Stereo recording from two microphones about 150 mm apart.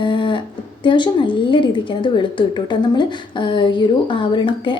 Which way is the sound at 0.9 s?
30° left (ahead or behind).